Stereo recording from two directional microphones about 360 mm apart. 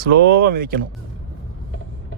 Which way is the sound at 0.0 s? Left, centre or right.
Right.